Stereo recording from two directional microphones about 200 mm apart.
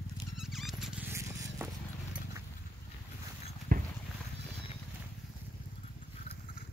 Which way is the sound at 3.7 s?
45° right (ahead or behind).